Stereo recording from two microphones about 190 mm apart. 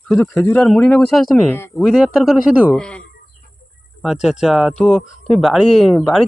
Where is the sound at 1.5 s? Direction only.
10° left (ahead or behind).